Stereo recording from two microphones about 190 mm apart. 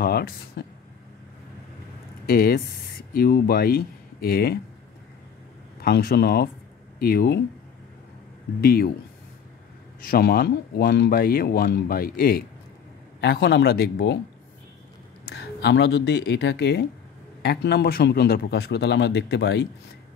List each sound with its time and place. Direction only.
0.0 s speech: 55° left (ahead or behind)
2.2 s speech: 55° left (ahead or behind)
5.8 s speech: 55° left (ahead or behind)
8.5 s speech: 50° left (ahead or behind)
10.0 s speech: 55° left (ahead or behind)
13.2 s speech: 65° left (ahead or behind)
15.3 s speech: 65° left (ahead or behind)